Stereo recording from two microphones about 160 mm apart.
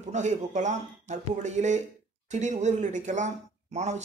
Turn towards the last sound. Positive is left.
turn(degrees=-45)  # may be behind; listen again after turning